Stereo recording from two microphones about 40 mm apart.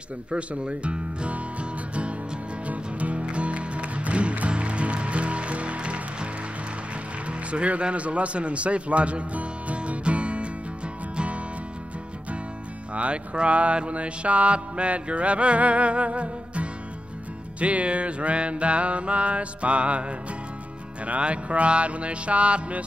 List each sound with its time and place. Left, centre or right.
0.3 s speech: right
2.6 s music: right
12.9 s music: right